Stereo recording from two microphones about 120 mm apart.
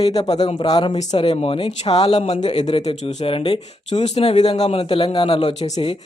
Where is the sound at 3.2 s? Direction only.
50° left (ahead or behind).